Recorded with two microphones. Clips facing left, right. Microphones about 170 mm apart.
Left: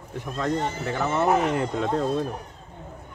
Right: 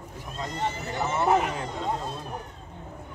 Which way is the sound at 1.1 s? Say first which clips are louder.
Left 2 dB; 65° left (ahead or behind).